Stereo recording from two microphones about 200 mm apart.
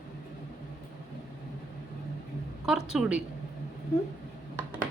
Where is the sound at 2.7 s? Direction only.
5° right (ahead or behind).